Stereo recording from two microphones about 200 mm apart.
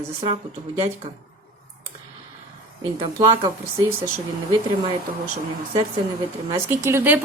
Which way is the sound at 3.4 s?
15° right (ahead or behind).